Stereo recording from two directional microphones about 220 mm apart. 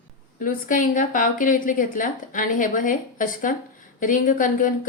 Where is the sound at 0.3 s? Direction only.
40° left (ahead or behind).